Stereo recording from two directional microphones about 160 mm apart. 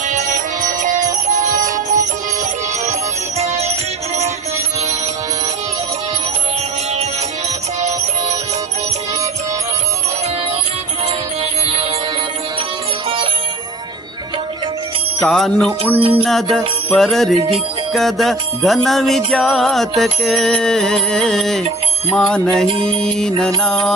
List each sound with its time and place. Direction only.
0.6 s music: 55° right (ahead or behind)
1.4 s music: 20° right (ahead or behind)
1.6 s music: 55° right (ahead or behind)
3.3 s music: 40° right (ahead or behind)
15.2 s music: centre (ahead or behind)
16.0 s music: 35° right (ahead or behind)
16.2 s music: centre (ahead or behind)